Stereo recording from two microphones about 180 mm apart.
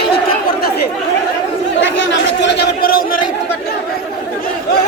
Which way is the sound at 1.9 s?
90° left.